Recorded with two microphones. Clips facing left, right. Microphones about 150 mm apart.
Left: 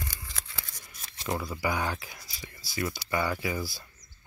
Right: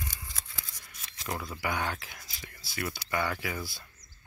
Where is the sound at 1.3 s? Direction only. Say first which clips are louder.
Left 3 dB; 5° left (ahead or behind).